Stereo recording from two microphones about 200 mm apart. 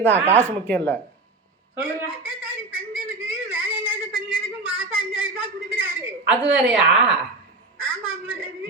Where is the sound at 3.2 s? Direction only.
10° right (ahead or behind).